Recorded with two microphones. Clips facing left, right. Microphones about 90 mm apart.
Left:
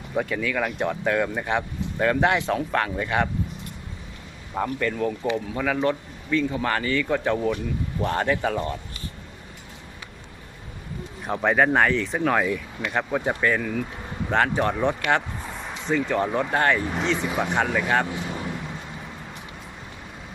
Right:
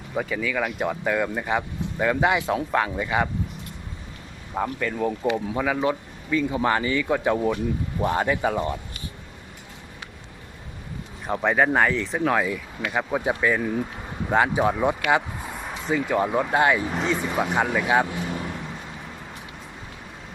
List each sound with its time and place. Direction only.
0.1 s speech: centre (ahead or behind)
4.5 s a man's voice: 5° right (ahead or behind)
11.3 s speech: centre (ahead or behind)
13.6 s speech: 20° right (ahead or behind)
14.3 s a man's voice: 10° right (ahead or behind)